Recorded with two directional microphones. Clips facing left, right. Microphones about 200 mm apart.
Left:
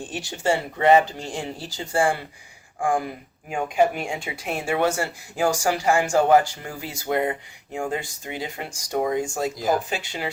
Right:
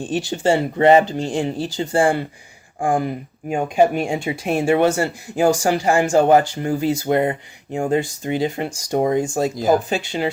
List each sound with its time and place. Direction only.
0.0 s speech: 25° right (ahead or behind)
3.5 s speech: 30° right (ahead or behind)